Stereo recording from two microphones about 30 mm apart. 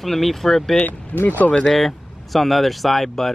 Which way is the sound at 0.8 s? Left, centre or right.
Left.